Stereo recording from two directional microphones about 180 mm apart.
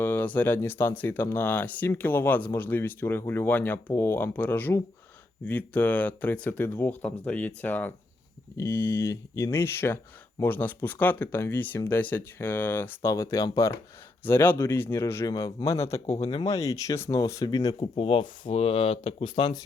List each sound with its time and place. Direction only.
0.0 s speech: 10° left (ahead or behind)
16.0 s speech: 35° left (ahead or behind)